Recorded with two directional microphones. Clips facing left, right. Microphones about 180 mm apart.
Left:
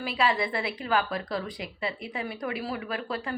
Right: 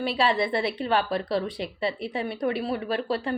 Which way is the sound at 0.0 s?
30° right (ahead or behind).